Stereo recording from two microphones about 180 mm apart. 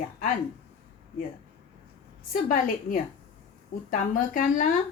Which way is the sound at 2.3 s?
50° left (ahead or behind).